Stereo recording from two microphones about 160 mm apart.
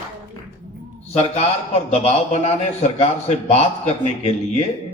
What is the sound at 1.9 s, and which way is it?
A man's voice, 40° left (ahead or behind).